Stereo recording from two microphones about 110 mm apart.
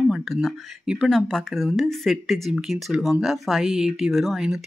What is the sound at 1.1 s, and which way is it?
Speech, 5° left (ahead or behind).